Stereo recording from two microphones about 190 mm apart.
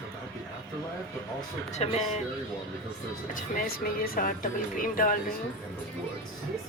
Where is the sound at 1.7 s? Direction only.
35° left (ahead or behind).